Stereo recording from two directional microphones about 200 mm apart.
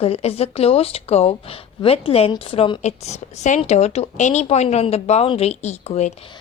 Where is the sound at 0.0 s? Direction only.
30° left (ahead or behind).